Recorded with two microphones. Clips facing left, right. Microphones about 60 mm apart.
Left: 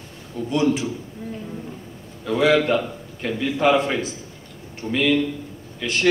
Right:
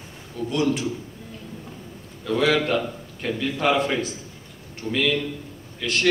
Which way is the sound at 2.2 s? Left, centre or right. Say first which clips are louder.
Left 2 dB; centre.